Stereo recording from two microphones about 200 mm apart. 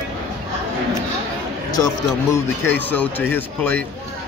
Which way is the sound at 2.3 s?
10° left (ahead or behind).